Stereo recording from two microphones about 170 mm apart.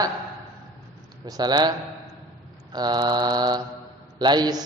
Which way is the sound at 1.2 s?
25° right (ahead or behind).